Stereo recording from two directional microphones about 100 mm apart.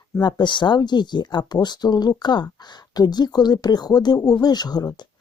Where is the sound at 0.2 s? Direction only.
45° left (ahead or behind).